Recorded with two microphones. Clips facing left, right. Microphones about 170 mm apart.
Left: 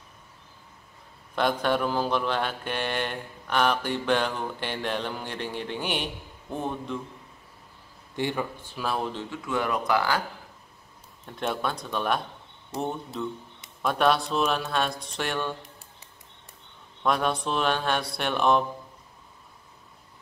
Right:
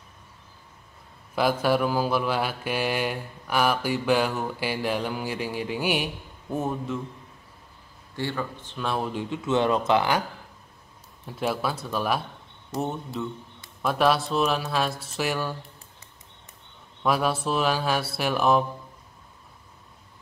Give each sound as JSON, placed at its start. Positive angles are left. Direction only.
{"t": 1.3, "sound": "mantra", "side_deg": -5}
{"t": 6.5, "sound": "speech", "side_deg": -5}
{"t": 8.2, "sound": "speech", "side_deg": 15}
{"t": 9.1, "sound": "speech", "side_deg": -20}
{"t": 11.2, "sound": "speech", "side_deg": -5}
{"t": 17.0, "sound": "speech", "side_deg": -5}